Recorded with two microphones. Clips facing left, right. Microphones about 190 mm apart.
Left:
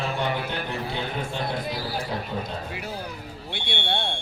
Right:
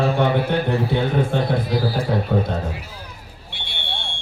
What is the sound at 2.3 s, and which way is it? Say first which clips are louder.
Speech: right 13 dB; 70° right (ahead or behind).